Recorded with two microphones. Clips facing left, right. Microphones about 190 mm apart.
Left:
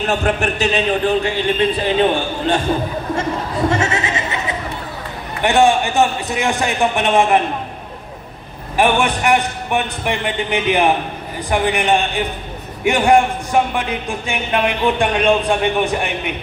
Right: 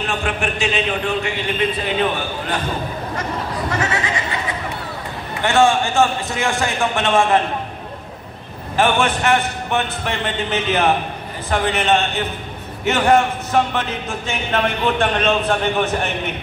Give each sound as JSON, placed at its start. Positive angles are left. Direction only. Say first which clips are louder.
{"t": 0.0, "sound": "a man's voice", "louder": "left 5 dB", "side_deg": 40}
{"t": 3.7, "sound": "a sound", "louder": "left 3 dB", "side_deg": 25}
{"t": 5.4, "sound": "a man's voice", "louder": "left 2 dB", "side_deg": 15}
{"t": 8.7, "sound": "a man's voice", "louder": "left 2 dB", "side_deg": 15}